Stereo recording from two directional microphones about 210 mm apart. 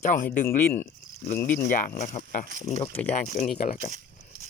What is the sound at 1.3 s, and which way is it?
Speech, 40° left (ahead or behind).